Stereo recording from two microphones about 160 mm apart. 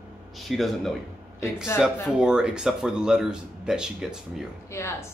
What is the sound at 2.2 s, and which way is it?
Speech, 5° right (ahead or behind).